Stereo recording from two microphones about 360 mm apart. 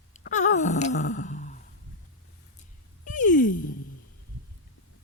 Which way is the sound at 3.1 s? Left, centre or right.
Left.